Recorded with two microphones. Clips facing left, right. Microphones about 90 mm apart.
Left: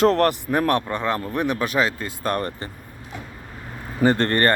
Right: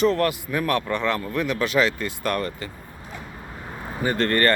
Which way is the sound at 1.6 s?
30° left (ahead or behind).